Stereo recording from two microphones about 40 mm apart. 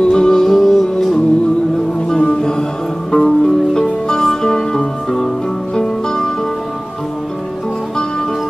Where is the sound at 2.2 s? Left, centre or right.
Centre.